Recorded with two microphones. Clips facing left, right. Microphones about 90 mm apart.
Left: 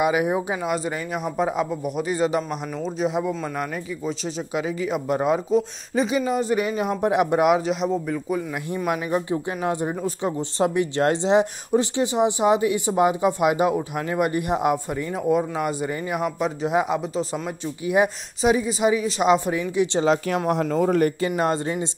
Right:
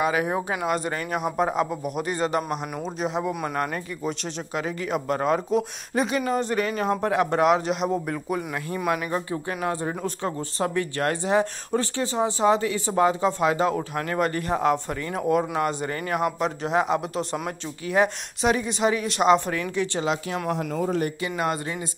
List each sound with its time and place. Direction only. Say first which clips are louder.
0.0 s speech: left 3 dB; 10° left (ahead or behind)
3.3 s speech: left 1 dB; 15° right (ahead or behind)
3.7 s speech: left 1 dB; centre (ahead or behind)
6.2 s speech: left 2 dB; 10° left (ahead or behind)
8.8 s speech: left 2 dB; 15° left (ahead or behind)
20.8 s speech: left 6 dB; 55° left (ahead or behind)
21.4 s speech: left 2 dB; 30° left (ahead or behind)